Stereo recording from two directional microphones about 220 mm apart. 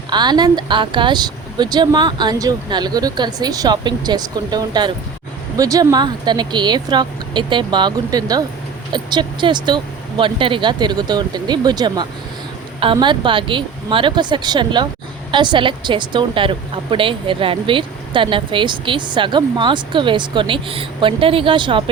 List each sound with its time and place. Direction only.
0.1 s a woman's voice: 20° right (ahead or behind)